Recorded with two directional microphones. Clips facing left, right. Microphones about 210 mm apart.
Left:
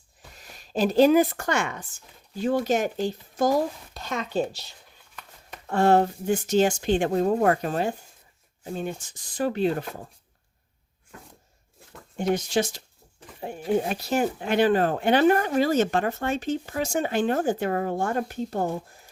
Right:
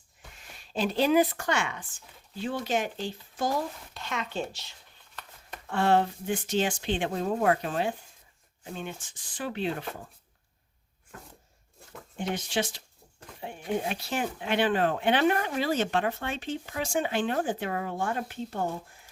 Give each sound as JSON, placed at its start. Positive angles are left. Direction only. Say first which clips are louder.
{"t": 0.3, "sound": "speech", "louder": "left 6 dB", "side_deg": 40}
{"t": 12.3, "sound": "speech", "louder": "left 7 dB", "side_deg": 40}
{"t": 13.1, "sound": "goat", "louder": "left 1 dB", "side_deg": 5}
{"t": 13.8, "sound": "speech", "louder": "left 6 dB", "side_deg": 40}